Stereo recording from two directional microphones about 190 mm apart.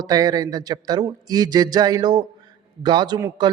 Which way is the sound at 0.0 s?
20° right (ahead or behind).